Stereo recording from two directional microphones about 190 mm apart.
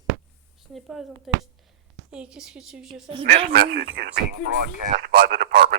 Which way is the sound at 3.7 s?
55° right (ahead or behind).